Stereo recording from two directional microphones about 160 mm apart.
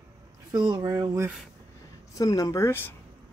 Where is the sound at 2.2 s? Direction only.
20° left (ahead or behind).